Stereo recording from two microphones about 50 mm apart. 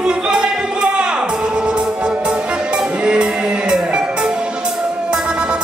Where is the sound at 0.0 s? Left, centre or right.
Centre.